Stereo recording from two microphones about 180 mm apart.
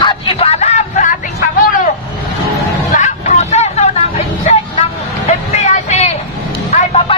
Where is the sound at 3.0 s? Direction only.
40° left (ahead or behind).